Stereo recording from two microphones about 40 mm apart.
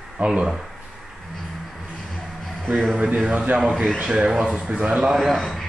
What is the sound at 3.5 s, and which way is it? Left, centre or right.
Speech, centre.